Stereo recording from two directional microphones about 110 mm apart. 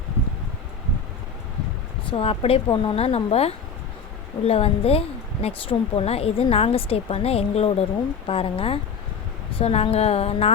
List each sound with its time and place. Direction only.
2.0 s speech: 60° left (ahead or behind)
2.6 s a woman's voice: 45° left (ahead or behind)
2.9 s a woman's voice: 65° left (ahead or behind)
8.3 s a woman's voice: 60° left (ahead or behind)